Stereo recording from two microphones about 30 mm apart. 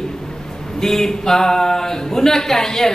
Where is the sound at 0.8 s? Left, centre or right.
Centre.